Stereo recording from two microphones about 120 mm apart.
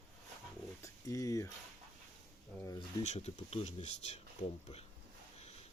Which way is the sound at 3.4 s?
60° left (ahead or behind).